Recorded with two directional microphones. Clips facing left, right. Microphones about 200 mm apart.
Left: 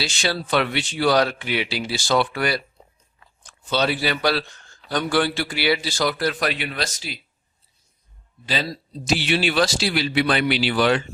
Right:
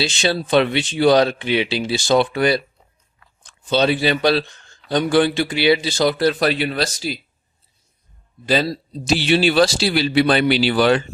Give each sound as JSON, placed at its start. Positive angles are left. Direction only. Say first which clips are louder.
{"t": 0.0, "sound": "a man's voice", "louder": "right 5 dB", "side_deg": -20}
{"t": 8.4, "sound": "a man's voice", "louder": "right 8 dB", "side_deg": -45}
{"t": 8.7, "sound": "speech", "louder": "right 3 dB", "side_deg": -30}